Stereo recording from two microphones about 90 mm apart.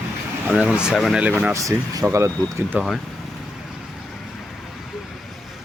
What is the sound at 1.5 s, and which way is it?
Speech, 35° right (ahead or behind).